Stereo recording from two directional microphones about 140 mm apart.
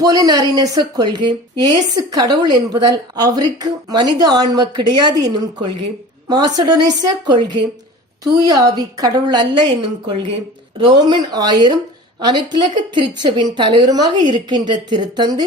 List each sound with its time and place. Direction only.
0.0 s a woman's voice: 30° right (ahead or behind)
10.8 s a woman's voice: 35° right (ahead or behind)